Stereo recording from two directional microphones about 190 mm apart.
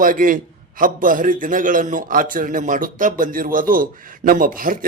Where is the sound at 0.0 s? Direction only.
45° right (ahead or behind).